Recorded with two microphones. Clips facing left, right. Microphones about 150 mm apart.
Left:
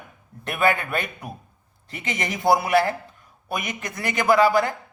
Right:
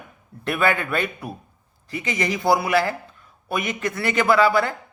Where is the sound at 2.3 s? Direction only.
20° left (ahead or behind).